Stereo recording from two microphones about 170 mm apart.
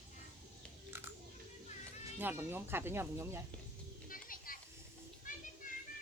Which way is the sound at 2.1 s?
10° right (ahead or behind).